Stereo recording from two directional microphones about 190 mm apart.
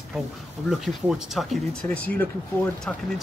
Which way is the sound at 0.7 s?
5° right (ahead or behind).